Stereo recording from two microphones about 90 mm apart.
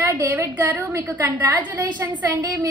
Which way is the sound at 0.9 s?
35° right (ahead or behind).